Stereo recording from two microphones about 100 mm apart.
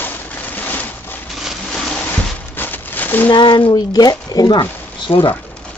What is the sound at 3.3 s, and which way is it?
Speech, 50° left (ahead or behind).